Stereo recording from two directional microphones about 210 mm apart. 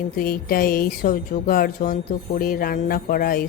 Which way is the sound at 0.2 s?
45° left (ahead or behind).